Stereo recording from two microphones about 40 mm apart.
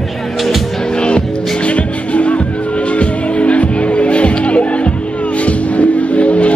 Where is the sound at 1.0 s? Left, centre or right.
Left.